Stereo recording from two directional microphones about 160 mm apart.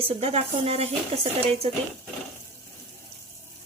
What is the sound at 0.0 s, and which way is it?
Speech, 40° right (ahead or behind).